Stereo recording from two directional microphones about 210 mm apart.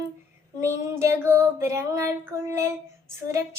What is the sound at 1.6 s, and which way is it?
Female singing, 15° right (ahead or behind).